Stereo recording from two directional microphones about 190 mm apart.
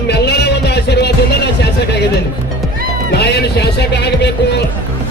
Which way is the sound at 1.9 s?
60° left (ahead or behind).